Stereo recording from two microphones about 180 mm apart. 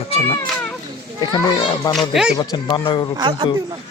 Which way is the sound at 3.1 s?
20° right (ahead or behind).